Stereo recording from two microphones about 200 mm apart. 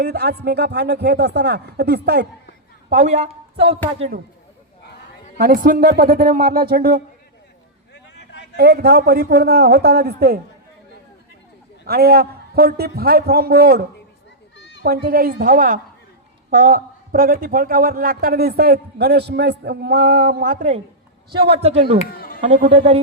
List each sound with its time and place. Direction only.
0.0 s speech: 55° right (ahead or behind)
2.9 s a woman's voice: 35° right (ahead or behind)
5.4 s a man's voice: 45° right (ahead or behind)
7.9 s a sound: 60° left (ahead or behind)
8.5 s a man's voice: 55° right (ahead or behind)
11.9 s a man's voice: 50° right (ahead or behind)
21.2 s a woman's voice: 50° right (ahead or behind)
21.5 s speech: 30° right (ahead or behind)
22.1 s a sound: 45° left (ahead or behind)
22.4 s a man's voice: 35° right (ahead or behind)